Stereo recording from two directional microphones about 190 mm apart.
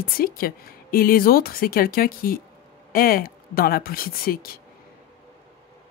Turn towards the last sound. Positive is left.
turn(degrees=50)  # may be behind; listen again after turning